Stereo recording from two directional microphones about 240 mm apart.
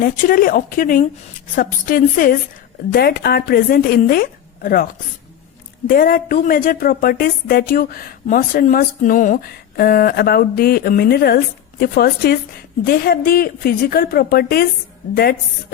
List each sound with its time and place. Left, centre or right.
0.0 s a woman's voice: left
5.9 s a woman's voice: left